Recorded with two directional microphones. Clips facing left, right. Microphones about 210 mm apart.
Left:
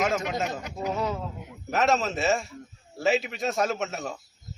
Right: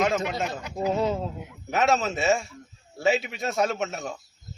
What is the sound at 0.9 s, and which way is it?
Speech, 25° right (ahead or behind).